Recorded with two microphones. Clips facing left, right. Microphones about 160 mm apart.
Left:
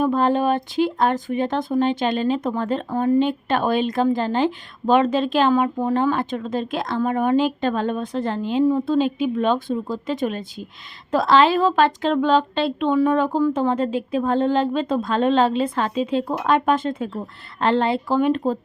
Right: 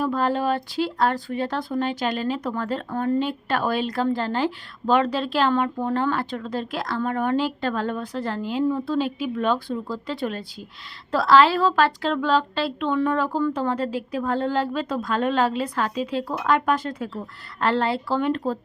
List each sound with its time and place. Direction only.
0.0 s speech: 20° left (ahead or behind)